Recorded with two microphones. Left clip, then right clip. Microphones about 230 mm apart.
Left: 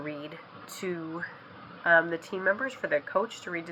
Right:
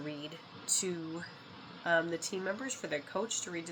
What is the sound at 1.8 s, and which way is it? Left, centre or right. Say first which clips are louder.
Speech: left 8 dB; right.